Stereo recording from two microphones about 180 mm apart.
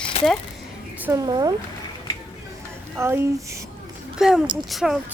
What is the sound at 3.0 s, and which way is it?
Speech, 15° right (ahead or behind).